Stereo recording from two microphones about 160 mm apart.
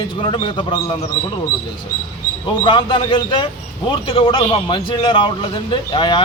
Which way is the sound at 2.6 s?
30° left (ahead or behind).